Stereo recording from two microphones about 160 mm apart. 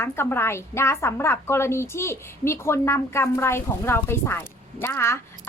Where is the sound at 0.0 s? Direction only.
15° left (ahead or behind).